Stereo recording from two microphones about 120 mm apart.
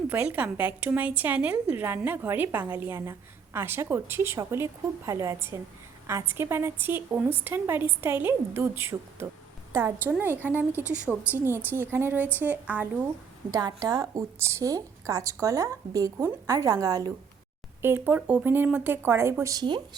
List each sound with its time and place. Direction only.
0.1 s a woman's voice: 10° right (ahead or behind)
13.5 s a woman's voice: 30° right (ahead or behind)
17.8 s a woman's voice: 20° right (ahead or behind)
19.6 s speech: 40° right (ahead or behind)